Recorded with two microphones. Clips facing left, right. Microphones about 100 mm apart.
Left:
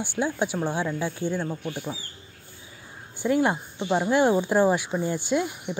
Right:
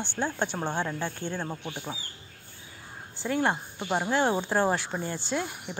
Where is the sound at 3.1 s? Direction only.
15° left (ahead or behind).